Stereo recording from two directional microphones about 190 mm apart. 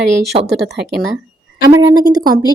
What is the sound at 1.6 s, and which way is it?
Speech, 15° right (ahead or behind).